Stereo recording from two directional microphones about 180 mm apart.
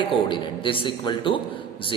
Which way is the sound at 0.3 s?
30° left (ahead or behind).